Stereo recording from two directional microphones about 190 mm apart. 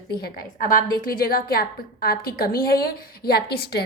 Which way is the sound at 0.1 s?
55° left (ahead or behind).